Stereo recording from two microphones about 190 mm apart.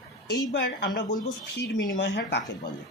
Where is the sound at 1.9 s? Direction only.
70° left (ahead or behind).